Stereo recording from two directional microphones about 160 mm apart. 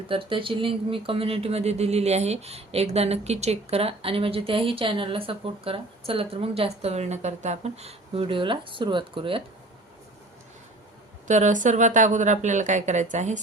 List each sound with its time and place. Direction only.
0.1 s speech: 35° right (ahead or behind)
11.3 s speech: 50° right (ahead or behind)